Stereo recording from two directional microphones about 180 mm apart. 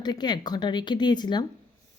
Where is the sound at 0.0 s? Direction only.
25° left (ahead or behind).